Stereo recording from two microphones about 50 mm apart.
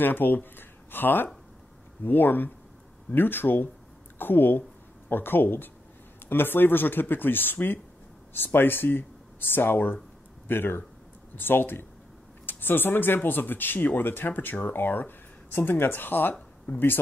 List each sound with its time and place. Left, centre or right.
0.0 s speech: left